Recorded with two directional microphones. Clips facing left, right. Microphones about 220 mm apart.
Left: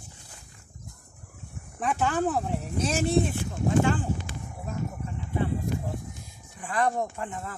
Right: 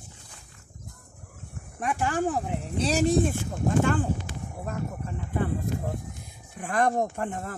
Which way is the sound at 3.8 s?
55° right (ahead or behind).